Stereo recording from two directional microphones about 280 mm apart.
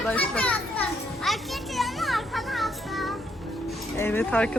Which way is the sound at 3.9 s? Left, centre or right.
Centre.